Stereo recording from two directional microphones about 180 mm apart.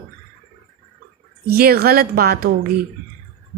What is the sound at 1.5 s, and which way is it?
Speech, 60° right (ahead or behind).